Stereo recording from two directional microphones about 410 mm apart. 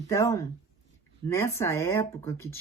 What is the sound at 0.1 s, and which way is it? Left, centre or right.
A woman's voice, centre.